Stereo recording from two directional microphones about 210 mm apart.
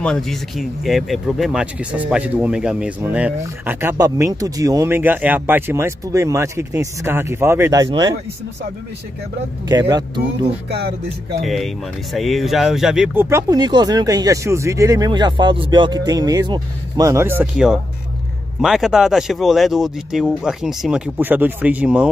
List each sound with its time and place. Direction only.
0.0 s speech: 5° left (ahead or behind); by 8.1 s 20° right (ahead or behind)
9.7 s speech: 20° right (ahead or behind)
11.4 s speech: centre (ahead or behind)